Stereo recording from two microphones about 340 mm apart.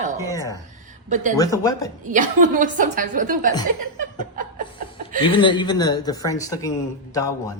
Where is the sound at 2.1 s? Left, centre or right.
Right.